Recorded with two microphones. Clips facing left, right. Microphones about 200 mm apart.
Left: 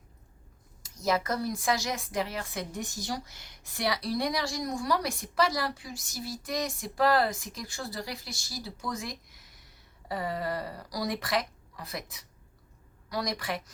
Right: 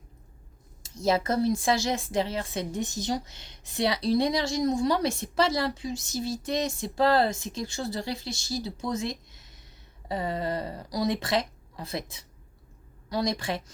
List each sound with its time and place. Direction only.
0.8 s speech: 30° right (ahead or behind)